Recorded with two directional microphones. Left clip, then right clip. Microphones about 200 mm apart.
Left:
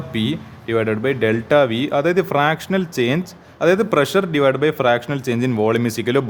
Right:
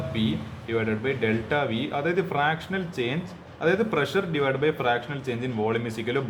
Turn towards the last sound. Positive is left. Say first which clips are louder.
# left 9 dB
turn(degrees=55)  # may be behind; listen again after turning